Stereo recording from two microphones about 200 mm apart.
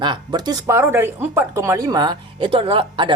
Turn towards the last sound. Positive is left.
turn(degrees=-25)  # may be behind; listen again after turning